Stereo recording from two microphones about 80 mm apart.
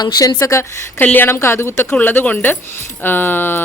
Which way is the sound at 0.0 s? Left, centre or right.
Left.